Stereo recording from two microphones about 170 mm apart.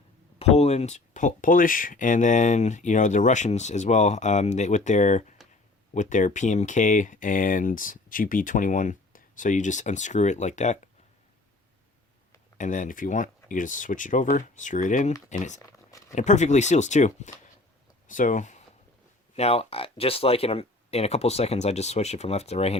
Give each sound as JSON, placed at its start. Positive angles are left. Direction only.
{"t": 0.3, "sound": "speech", "side_deg": 40}
{"t": 12.5, "sound": "speech", "side_deg": 50}
{"t": 15.6, "sound": "a sound", "side_deg": 20}
{"t": 16.1, "sound": "speech", "side_deg": 45}